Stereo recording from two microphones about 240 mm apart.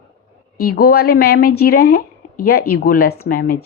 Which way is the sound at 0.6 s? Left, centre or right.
Left.